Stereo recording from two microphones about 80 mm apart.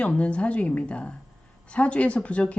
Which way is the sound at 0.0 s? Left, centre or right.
Centre.